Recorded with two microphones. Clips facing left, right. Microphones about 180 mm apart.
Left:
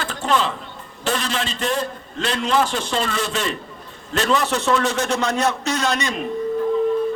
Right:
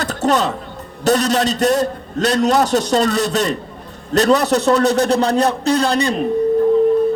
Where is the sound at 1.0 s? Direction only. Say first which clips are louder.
Right 9 dB; 40° right (ahead or behind).